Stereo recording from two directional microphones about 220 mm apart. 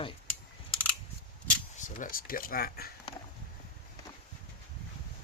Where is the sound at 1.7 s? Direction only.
35° left (ahead or behind).